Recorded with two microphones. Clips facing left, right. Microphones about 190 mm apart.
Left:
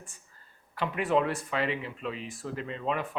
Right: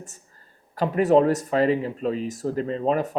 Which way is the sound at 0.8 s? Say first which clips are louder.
Right 9 dB; 40° right (ahead or behind).